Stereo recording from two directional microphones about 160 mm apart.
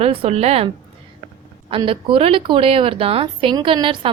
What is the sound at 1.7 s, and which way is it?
A woman's voice, 35° right (ahead or behind).